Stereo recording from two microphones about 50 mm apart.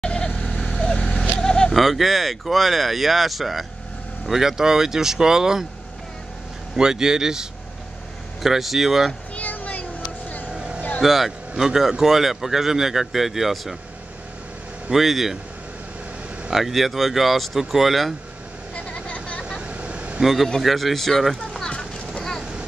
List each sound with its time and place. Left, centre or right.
0.0 s vehicle: centre
1.7 s speech: centre
6.8 s speech: centre
9.3 s a sound: left
10.5 s vehicle: right
11.0 s speech: centre
14.9 s speech: centre
16.4 s speech: centre
18.9 s vehicle: left
19.6 s vehicle: right
20.2 s a man's voice: centre
21.6 s clip-clop: centre